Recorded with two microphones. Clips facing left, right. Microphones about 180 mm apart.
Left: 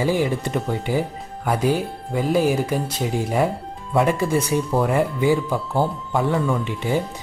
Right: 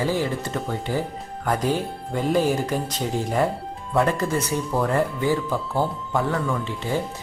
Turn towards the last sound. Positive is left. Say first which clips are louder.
# left 3 dB
turn(degrees=15)  # may be behind; listen again after turning